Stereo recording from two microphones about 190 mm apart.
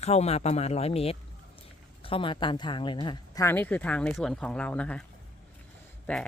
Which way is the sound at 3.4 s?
10° left (ahead or behind).